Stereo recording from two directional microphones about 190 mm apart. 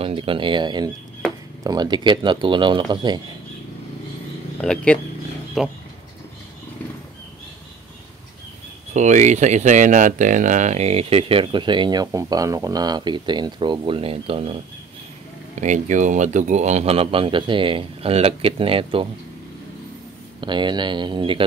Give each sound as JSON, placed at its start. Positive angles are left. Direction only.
{"t": 0.0, "sound": "speech", "side_deg": -30}
{"t": 4.6, "sound": "speech", "side_deg": 5}
{"t": 8.9, "sound": "speech", "side_deg": -40}
{"t": 20.3, "sound": "speech", "side_deg": -25}